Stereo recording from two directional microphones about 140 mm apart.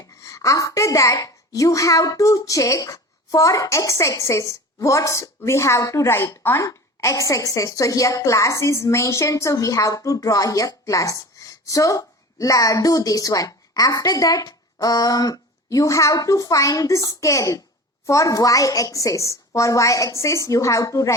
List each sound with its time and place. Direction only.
0.0 s a child's voice: 25° left (ahead or behind)